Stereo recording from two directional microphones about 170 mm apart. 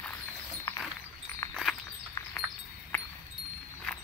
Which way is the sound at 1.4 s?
15° left (ahead or behind).